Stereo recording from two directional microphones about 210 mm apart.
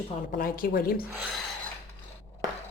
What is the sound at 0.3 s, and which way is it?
Speech, 40° left (ahead or behind).